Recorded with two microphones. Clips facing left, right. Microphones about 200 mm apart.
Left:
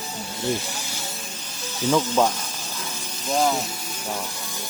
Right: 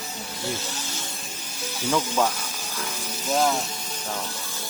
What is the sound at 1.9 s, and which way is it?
Speech, 10° left (ahead or behind).